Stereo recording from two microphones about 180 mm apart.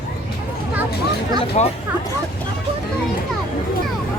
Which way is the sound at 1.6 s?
35° left (ahead or behind).